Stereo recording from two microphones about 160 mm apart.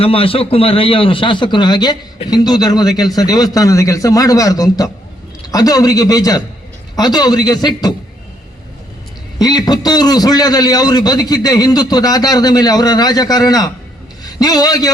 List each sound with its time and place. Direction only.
0.0 s a man's voice: 35° left (ahead or behind)
9.4 s a man's voice: 25° left (ahead or behind)